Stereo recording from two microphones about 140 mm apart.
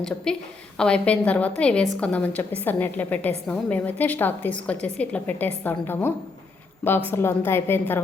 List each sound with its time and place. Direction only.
0.3 s a woman's voice: 5° left (ahead or behind)